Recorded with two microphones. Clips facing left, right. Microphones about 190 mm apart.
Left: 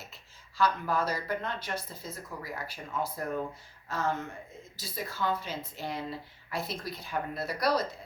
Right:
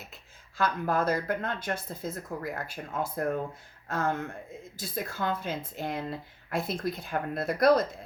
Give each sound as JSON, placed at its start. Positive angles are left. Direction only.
{"t": 0.1, "sound": "speech", "side_deg": -50}